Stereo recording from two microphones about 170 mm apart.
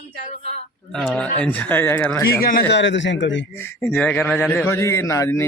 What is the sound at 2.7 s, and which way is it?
Speech, 90° left.